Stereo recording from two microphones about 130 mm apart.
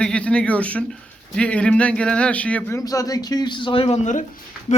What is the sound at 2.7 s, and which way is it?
A man's voice, 25° left (ahead or behind).